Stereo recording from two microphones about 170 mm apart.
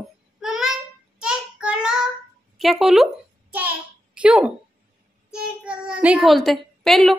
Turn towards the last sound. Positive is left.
turn(degrees=0)  # may be behind; listen again after turning